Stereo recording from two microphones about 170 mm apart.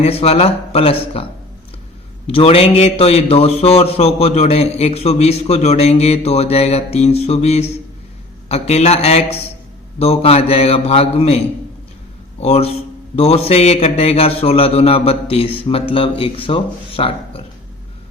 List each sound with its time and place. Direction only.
0.0 s a man's voice: 35° left (ahead or behind)
12.4 s a man's voice: 35° left (ahead or behind)